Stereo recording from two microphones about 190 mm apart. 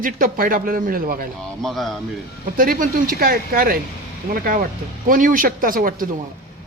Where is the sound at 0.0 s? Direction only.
45° right (ahead or behind).